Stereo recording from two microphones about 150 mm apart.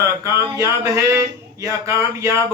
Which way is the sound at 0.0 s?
20° right (ahead or behind).